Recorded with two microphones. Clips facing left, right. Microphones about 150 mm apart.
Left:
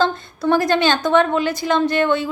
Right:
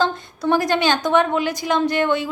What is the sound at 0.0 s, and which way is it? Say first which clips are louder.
A woman's voice: left 2 dB; 15° right (ahead or behind).